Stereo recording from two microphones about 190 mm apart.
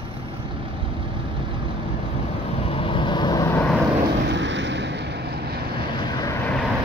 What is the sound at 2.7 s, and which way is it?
Vehicle, 30° left (ahead or behind).